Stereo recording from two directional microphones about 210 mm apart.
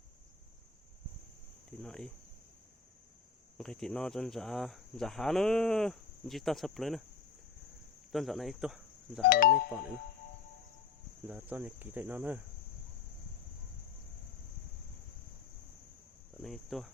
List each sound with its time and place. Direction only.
1.8 s speech: 5° left (ahead or behind)
3.6 s speech: centre (ahead or behind)
8.1 s speech: centre (ahead or behind)
9.3 s speech: 45° left (ahead or behind)
11.3 s speech: 5° right (ahead or behind)
16.4 s cricket: centre (ahead or behind)